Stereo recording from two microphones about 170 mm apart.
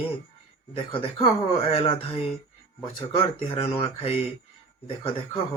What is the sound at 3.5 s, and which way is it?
Speech, 35° left (ahead or behind).